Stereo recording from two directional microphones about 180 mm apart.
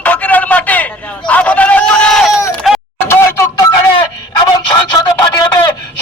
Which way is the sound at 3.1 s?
15° left (ahead or behind).